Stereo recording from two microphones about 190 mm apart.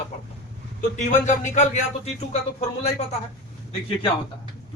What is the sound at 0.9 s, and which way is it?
Speech, 40° left (ahead or behind).